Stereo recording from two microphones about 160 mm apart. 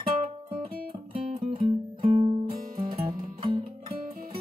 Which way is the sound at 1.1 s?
35° right (ahead or behind).